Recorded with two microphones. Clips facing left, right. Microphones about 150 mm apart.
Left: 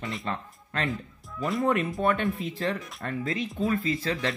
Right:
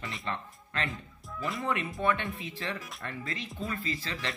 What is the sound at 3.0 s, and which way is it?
Speech, 40° left (ahead or behind).